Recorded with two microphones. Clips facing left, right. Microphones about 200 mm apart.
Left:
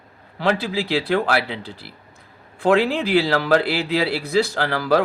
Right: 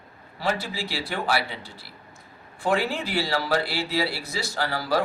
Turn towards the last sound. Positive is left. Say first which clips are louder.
# left 6 dB
turn(degrees=60)  # may be behind; listen again after turning